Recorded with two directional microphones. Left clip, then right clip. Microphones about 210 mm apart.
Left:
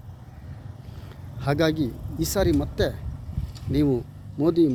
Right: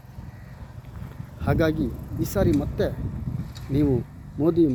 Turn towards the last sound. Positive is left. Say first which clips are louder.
# even
turn(degrees=0)  # may be behind; listen again after turning